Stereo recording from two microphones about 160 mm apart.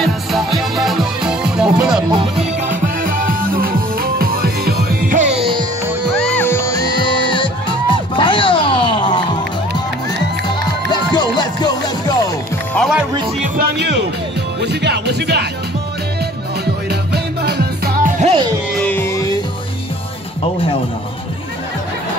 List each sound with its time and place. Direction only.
0.0 s music: centre (ahead or behind)
2.7 s music: 60° right (ahead or behind); by 5.7 s 35° right (ahead or behind)
6.1 s music: 5° left (ahead or behind); by 9.2 s 30° left (ahead or behind)
10.9 s music: 25° left (ahead or behind)
12.7 s music: centre (ahead or behind)
13.4 s music: 70° right (ahead or behind); by 15.4 s 90° right
16.9 s music: 90° right; by 18.3 s 55° right (ahead or behind)
18.7 s music: 10° left (ahead or behind)